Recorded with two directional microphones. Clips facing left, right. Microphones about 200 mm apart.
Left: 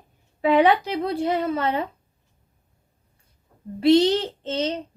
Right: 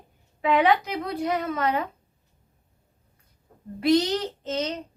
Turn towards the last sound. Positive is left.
turn(degrees=30)  # may be behind; listen again after turning